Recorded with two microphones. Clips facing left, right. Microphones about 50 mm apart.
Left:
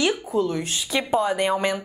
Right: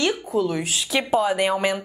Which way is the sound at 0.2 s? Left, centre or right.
Centre.